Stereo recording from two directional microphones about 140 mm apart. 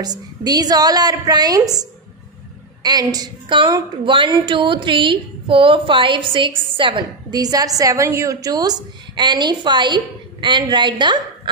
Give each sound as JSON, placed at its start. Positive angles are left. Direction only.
{"t": 0.0, "sound": "a woman's voice", "side_deg": -30}